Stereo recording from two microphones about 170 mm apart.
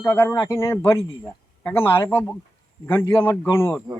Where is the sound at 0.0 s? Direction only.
10° left (ahead or behind).